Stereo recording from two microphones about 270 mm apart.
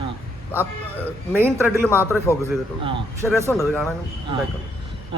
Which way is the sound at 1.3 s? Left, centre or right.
Centre.